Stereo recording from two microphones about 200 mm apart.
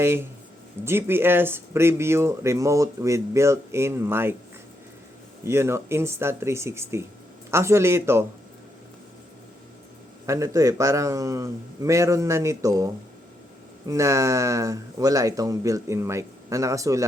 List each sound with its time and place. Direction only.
0.0 s speech: 10° right (ahead or behind)
5.5 s speech: 15° right (ahead or behind)
10.2 s speech: 15° right (ahead or behind)